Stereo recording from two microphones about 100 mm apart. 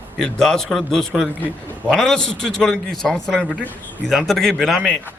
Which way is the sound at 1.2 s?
15° right (ahead or behind).